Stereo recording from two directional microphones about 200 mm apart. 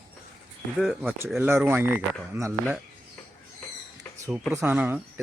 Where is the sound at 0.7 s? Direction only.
5° left (ahead or behind); by 2.5 s 10° right (ahead or behind).